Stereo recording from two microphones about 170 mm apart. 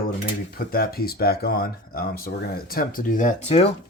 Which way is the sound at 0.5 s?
65° left (ahead or behind).